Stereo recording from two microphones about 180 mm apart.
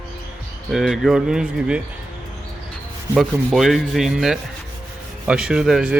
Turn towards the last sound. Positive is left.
turn(degrees=-5)  # may be behind; listen again after turning